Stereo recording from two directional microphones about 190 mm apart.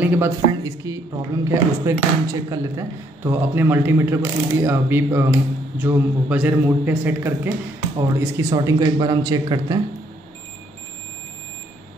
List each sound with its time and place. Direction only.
0.0 s speech: 10° right (ahead or behind)